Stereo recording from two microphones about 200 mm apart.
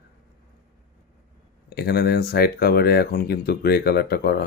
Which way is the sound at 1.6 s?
55° left (ahead or behind).